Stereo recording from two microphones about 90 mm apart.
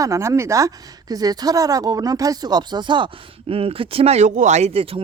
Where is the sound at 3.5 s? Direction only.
90° right.